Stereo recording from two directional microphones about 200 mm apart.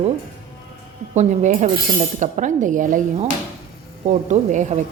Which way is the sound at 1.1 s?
35° right (ahead or behind).